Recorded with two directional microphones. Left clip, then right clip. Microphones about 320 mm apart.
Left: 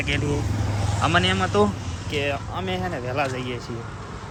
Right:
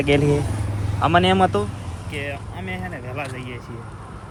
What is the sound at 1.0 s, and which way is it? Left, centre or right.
Speech, centre.